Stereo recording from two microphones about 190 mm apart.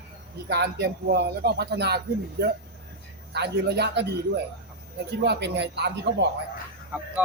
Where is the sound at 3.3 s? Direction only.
60° right (ahead or behind).